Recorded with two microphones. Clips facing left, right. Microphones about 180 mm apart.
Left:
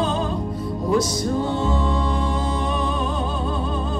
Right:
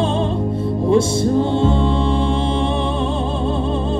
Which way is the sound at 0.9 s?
25° right (ahead or behind).